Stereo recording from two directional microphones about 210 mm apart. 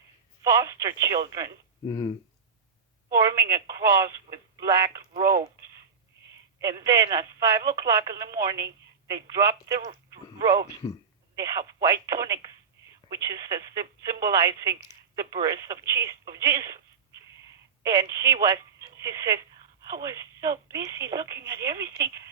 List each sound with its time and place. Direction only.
0.4 s speech: 15° right (ahead or behind)
1.9 s speech: 15° left (ahead or behind)
3.1 s speech: 15° right (ahead or behind)
17.8 s speech: 15° right (ahead or behind)